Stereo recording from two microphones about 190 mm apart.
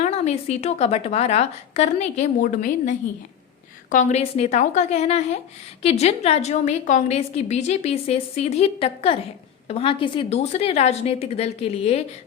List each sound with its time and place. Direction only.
0.0 s a woman's voice: 35° left (ahead or behind)
3.9 s a woman's voice: 35° left (ahead or behind)